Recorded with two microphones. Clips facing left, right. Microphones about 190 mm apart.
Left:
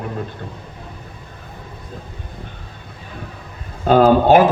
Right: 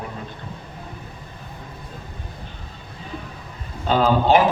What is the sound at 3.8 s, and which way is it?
Speech, 55° left (ahead or behind).